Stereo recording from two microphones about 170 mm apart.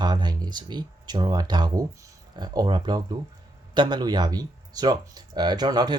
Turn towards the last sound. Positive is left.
turn(degrees=-25)  # may be behind; listen again after turning